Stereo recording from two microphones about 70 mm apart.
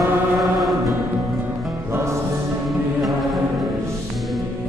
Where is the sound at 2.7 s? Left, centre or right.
Centre.